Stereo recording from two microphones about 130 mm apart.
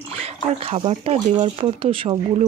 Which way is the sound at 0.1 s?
50° right (ahead or behind).